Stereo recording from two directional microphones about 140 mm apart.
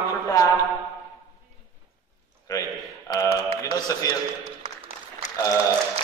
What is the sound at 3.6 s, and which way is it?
Speech, 25° left (ahead or behind).